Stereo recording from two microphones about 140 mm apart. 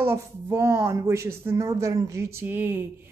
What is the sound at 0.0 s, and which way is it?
Speech, 20° right (ahead or behind).